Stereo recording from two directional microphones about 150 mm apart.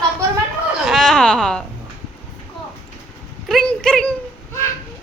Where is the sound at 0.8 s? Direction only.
Centre (ahead or behind).